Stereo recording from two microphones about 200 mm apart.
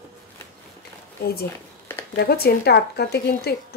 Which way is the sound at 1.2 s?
50° left (ahead or behind).